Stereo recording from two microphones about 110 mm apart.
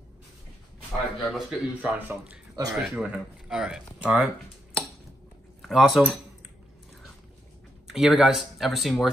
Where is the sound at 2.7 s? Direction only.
5° right (ahead or behind).